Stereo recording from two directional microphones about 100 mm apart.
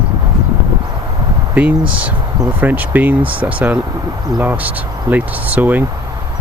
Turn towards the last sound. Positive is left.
turn(degrees=-20)  # may be behind; listen again after turning